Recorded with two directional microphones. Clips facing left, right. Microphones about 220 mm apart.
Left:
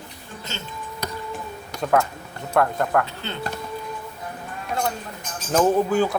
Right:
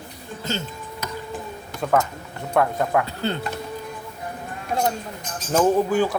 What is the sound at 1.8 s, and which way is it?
Speech, centre (ahead or behind).